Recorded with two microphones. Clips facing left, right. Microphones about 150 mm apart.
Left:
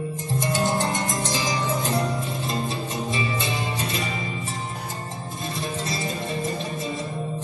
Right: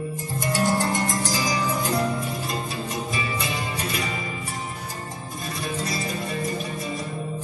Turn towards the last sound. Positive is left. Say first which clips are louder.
# even
turn(degrees=25)  # may be behind; listen again after turning